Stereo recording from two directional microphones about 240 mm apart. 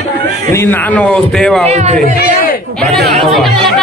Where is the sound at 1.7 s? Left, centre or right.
Right.